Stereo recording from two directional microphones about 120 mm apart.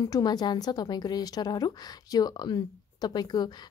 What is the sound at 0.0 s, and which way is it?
A woman's voice, 35° left (ahead or behind).